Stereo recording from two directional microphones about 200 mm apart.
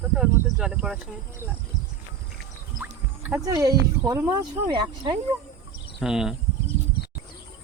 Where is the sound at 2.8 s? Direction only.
10° right (ahead or behind).